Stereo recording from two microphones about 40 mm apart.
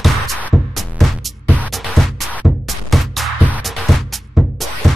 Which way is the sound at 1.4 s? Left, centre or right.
Right.